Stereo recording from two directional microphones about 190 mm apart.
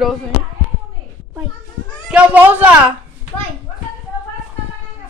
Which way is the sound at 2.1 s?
10° right (ahead or behind).